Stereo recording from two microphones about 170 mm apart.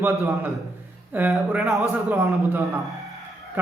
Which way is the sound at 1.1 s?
10° right (ahead or behind).